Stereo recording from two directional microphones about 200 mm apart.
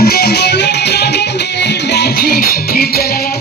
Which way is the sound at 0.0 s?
50° left (ahead or behind).